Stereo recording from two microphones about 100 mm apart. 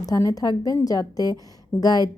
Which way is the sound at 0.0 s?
35° left (ahead or behind).